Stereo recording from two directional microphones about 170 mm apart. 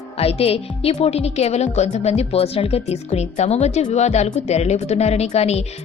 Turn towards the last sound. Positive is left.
turn(degrees=40)  # may be behind; listen again after turning